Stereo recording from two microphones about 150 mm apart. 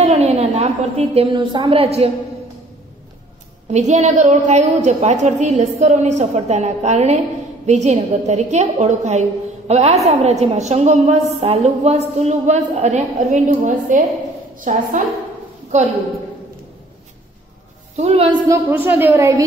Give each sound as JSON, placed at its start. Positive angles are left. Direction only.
{"t": 0.0, "sound": "a woman's voice", "side_deg": -45}
{"t": 3.7, "sound": "a woman's voice", "side_deg": -50}
{"t": 17.9, "sound": "a woman's voice", "side_deg": -45}
{"t": 18.5, "sound": "a woman's voice", "side_deg": -15}